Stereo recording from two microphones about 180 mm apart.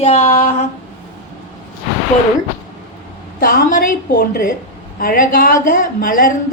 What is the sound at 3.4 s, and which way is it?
A woman's voice, 50° left (ahead or behind).